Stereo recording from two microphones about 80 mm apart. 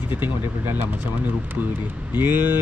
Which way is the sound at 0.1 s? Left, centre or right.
Right.